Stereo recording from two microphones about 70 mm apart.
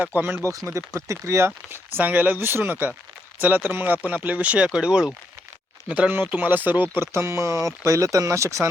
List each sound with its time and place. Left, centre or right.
0.0 s speech: right
0.4 s speech: right
6.9 s speech: right